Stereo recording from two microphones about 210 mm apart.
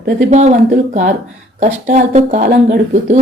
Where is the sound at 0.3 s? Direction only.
35° right (ahead or behind).